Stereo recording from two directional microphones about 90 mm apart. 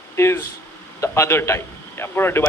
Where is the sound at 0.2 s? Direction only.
30° left (ahead or behind).